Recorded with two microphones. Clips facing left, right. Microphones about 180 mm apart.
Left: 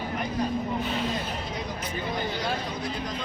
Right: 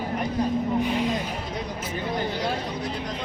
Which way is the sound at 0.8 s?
15° right (ahead or behind).